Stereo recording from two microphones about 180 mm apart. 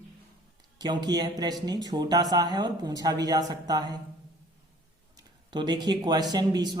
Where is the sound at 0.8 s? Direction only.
25° right (ahead or behind).